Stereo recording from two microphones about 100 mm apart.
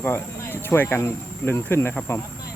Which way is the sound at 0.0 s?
25° left (ahead or behind).